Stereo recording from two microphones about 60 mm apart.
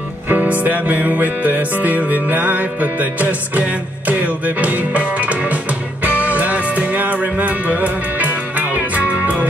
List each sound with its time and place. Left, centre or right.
0.3 s music: right